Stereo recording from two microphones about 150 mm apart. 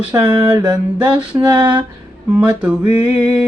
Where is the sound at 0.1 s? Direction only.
30° right (ahead or behind).